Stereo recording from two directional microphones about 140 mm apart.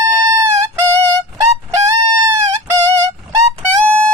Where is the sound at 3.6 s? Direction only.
10° left (ahead or behind).